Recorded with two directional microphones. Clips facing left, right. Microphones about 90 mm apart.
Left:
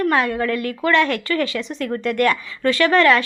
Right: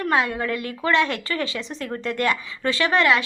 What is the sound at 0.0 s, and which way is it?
A woman's voice, 20° right (ahead or behind).